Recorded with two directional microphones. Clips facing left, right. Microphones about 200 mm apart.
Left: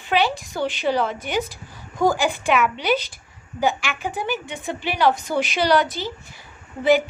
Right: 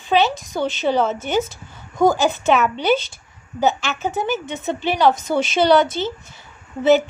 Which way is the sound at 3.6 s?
25° right (ahead or behind).